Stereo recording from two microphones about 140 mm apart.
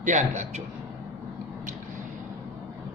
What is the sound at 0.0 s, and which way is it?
Speech, 55° right (ahead or behind).